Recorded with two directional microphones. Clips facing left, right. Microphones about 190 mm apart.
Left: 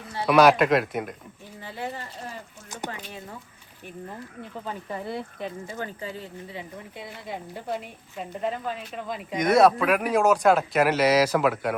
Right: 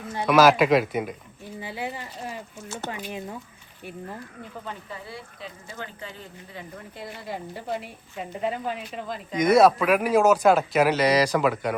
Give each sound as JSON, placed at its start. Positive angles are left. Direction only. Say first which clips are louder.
{"t": 0.3, "sound": "speech", "louder": "even", "side_deg": 0}
{"t": 1.6, "sound": "speech", "louder": "right 1 dB", "side_deg": -10}
{"t": 2.8, "sound": "speech", "louder": "even", "side_deg": 15}
{"t": 5.0, "sound": "speech", "louder": "left 7 dB", "side_deg": 55}
{"t": 6.9, "sound": "speech", "louder": "right 2 dB", "side_deg": 0}